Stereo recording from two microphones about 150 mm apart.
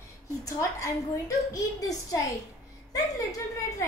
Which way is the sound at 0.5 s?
20° left (ahead or behind).